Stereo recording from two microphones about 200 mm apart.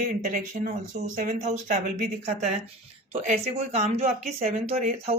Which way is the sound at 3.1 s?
30° right (ahead or behind).